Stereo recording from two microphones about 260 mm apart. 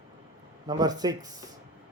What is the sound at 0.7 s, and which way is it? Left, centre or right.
Speech, centre.